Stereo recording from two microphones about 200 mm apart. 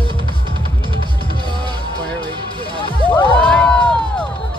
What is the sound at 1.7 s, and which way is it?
Music, 20° right (ahead or behind).